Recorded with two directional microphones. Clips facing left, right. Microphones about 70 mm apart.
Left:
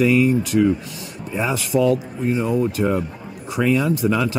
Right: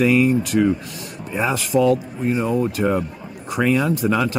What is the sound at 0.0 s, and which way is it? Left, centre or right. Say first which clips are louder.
Speech: even; right.